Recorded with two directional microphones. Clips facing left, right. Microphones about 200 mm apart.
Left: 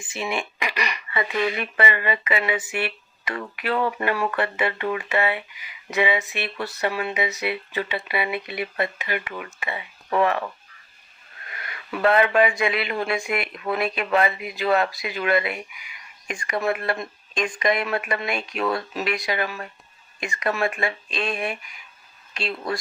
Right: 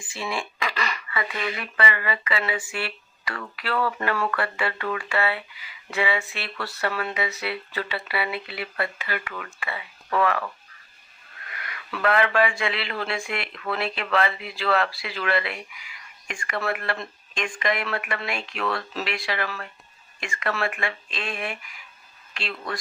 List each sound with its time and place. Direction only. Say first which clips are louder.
0.0 s speech: left 3 dB; 20° left (ahead or behind)